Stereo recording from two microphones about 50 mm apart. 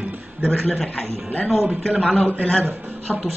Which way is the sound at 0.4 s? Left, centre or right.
Centre.